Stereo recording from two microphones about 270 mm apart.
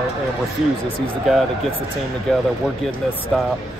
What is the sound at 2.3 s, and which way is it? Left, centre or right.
Speech, centre.